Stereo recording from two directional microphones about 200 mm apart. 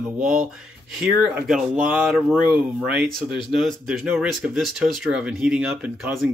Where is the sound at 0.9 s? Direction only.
5° right (ahead or behind).